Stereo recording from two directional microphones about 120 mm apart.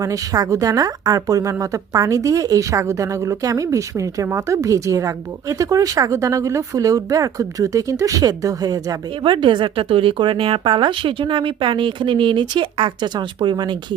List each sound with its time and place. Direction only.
0.0 s speech: 30° right (ahead or behind)
9.2 s speech: 40° right (ahead or behind)